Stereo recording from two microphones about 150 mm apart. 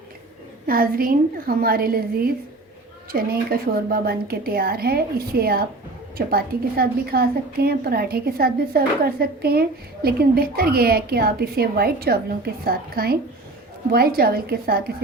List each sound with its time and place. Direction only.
0.7 s a woman's voice: 75° right (ahead or behind); by 2.3 s 90° right
3.1 s a woman's voice: 75° right (ahead or behind)